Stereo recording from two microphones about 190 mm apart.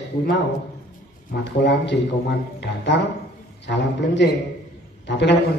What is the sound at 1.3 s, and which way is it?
Speech, 60° left (ahead or behind).